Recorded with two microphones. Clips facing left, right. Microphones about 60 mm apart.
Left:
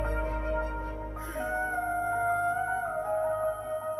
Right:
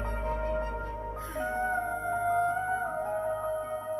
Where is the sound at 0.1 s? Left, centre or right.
Left.